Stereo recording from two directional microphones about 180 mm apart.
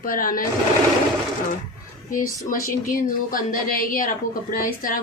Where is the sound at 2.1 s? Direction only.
50° left (ahead or behind).